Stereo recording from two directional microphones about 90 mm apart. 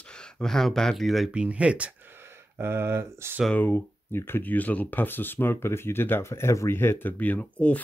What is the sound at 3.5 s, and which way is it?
Speech, 20° left (ahead or behind).